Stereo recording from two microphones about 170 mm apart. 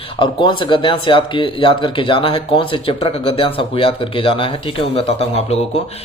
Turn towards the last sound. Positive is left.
turn(degrees=40)  # may be behind; listen again after turning